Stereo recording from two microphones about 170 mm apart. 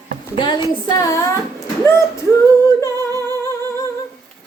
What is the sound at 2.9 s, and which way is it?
Singing, 20° right (ahead or behind).